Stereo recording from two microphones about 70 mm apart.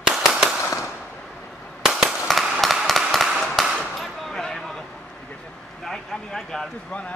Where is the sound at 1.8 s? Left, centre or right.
Centre.